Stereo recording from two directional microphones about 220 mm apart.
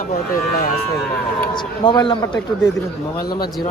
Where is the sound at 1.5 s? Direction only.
20° left (ahead or behind).